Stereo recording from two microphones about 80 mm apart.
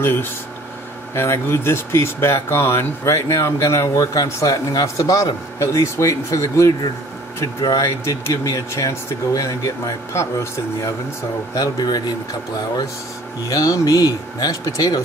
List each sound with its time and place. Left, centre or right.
0.0 s speech: left
7.8 s speech: left
11.5 s speech: left
13.5 s speech: left